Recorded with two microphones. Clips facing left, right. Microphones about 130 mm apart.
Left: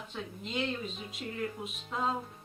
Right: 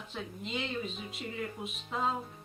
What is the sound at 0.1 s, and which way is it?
Speech, centre (ahead or behind).